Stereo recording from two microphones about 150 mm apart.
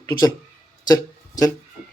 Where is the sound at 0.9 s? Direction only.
25° left (ahead or behind).